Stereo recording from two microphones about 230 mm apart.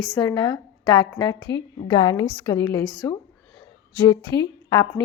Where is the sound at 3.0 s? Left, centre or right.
Centre.